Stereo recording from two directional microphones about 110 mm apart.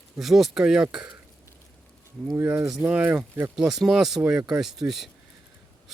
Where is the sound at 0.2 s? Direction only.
Centre (ahead or behind).